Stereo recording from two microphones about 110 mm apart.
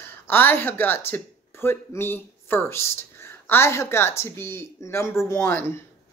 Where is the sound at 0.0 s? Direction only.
20° left (ahead or behind).